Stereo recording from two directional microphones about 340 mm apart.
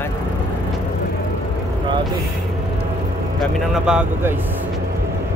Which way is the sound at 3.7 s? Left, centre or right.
Centre.